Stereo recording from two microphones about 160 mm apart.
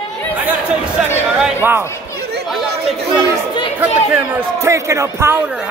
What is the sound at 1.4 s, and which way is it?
Speech, 15° right (ahead or behind).